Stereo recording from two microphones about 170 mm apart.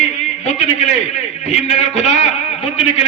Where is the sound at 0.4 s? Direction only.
40° left (ahead or behind).